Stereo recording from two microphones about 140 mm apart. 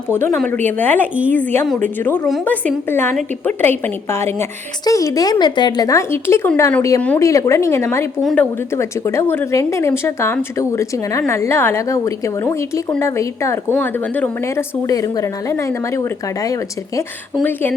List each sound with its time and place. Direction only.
0.1 s a woman's voice: 15° left (ahead or behind)
8.2 s a woman's voice: centre (ahead or behind)
8.7 s a woman's voice: 20° left (ahead or behind)
17.4 s a woman's voice: 15° left (ahead or behind)